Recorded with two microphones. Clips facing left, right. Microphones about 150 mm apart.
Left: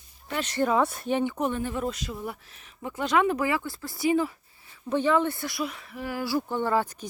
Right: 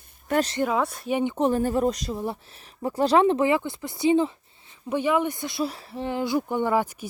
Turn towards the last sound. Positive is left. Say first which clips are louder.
# right 2 dB
turn(degrees=-10)  # may be behind; listen again after turning